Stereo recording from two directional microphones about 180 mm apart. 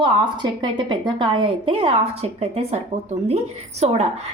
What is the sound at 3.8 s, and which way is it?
Speech, 35° right (ahead or behind).